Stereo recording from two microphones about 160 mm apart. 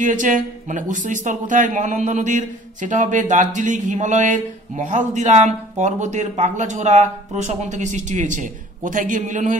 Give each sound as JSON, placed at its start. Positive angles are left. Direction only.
{"t": 0.0, "sound": "speech", "side_deg": -55}